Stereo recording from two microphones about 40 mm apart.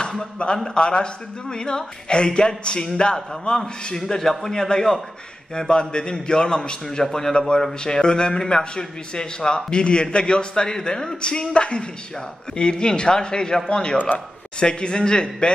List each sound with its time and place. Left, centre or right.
0.2 s a man's voice: left